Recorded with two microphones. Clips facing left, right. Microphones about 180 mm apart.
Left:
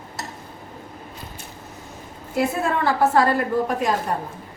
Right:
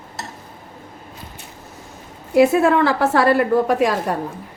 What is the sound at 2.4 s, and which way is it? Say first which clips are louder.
A woman's voice: right 9 dB; 80° right.